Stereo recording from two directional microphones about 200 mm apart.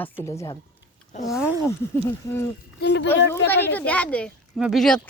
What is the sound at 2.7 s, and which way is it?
Speech, 55° left (ahead or behind).